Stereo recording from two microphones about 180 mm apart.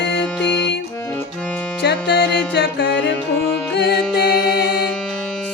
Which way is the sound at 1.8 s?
70° left (ahead or behind).